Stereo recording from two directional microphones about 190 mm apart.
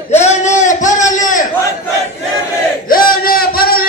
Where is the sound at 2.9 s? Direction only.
50° left (ahead or behind).